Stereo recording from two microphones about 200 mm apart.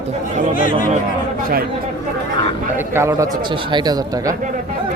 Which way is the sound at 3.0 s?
15° right (ahead or behind).